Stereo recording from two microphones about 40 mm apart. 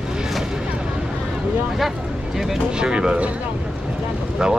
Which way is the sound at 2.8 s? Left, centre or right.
Right.